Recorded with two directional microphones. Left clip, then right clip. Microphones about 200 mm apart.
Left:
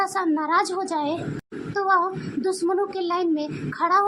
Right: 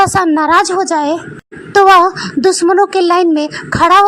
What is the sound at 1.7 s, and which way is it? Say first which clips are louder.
A woman's voice: right 15 dB; 40° right (ahead or behind).